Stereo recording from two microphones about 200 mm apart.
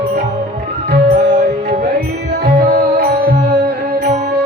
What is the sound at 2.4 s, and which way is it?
Music, 50° right (ahead or behind).